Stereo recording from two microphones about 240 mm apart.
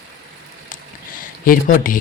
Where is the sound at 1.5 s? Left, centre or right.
Left.